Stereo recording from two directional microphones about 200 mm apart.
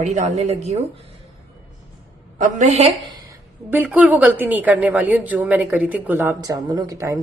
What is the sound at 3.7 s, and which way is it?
A woman's voice, 10° right (ahead or behind).